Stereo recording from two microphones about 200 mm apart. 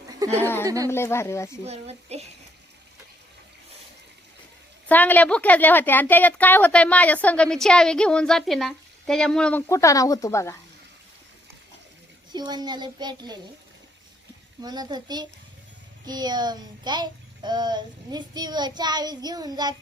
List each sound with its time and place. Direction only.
0.3 s a woman's voice: 10° left (ahead or behind)
1.6 s speech: 30° right (ahead or behind)
4.9 s a woman's voice: 10° left (ahead or behind)
12.3 s child singing: 20° right (ahead or behind)
14.6 s child singing: 20° right (ahead or behind)